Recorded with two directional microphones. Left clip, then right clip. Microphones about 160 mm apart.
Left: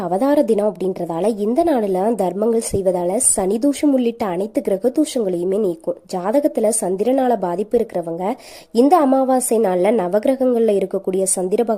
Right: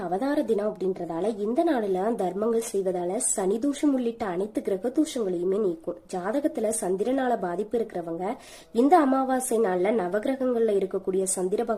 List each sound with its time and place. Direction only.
0.1 s a woman's voice: 50° left (ahead or behind)